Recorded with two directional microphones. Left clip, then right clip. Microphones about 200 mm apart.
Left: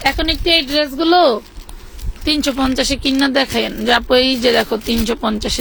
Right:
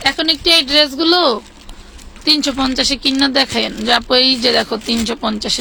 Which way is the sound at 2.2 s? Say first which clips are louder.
Right 2 dB; 20° left (ahead or behind).